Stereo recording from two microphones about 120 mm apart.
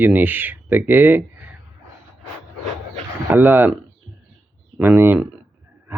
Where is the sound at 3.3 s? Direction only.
15° right (ahead or behind).